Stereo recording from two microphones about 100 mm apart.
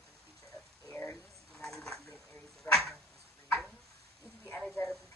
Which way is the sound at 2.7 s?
20° left (ahead or behind).